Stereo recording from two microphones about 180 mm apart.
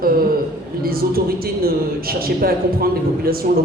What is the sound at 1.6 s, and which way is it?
A man's voice, 55° right (ahead or behind).